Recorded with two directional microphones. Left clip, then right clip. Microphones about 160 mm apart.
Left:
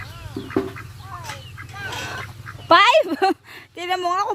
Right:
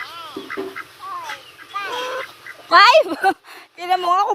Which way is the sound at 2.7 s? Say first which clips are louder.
Right 3 dB; 45° left (ahead or behind).